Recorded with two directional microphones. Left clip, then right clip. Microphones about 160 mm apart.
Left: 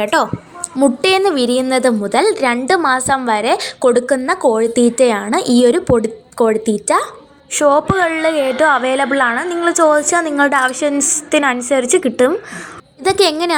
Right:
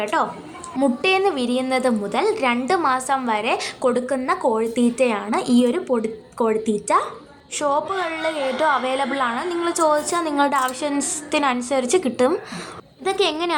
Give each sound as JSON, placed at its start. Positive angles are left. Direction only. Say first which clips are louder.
{"t": 0.0, "sound": "a woman's voice", "louder": "left 6 dB", "side_deg": 30}
{"t": 13.1, "sound": "speech", "louder": "left 8 dB", "side_deg": 35}